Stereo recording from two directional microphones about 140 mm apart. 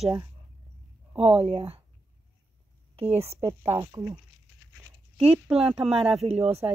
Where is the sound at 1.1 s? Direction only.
45° right (ahead or behind).